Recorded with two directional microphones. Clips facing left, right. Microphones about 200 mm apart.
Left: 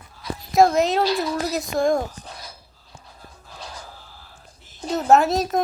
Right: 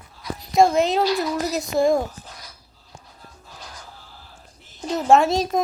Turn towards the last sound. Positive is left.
turn(degrees=0)  # may be behind; listen again after turning